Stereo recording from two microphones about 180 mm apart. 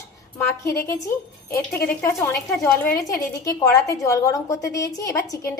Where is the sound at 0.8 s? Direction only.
15° left (ahead or behind).